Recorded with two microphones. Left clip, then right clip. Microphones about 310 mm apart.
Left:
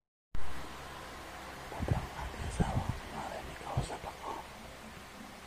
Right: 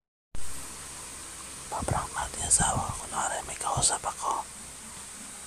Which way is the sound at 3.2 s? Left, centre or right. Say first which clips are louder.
Right 11 dB; right.